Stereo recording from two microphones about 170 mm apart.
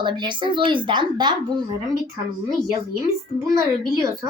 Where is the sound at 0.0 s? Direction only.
30° right (ahead or behind).